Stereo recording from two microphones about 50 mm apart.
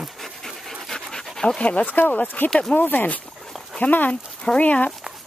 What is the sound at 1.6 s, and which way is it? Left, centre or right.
Speech, left.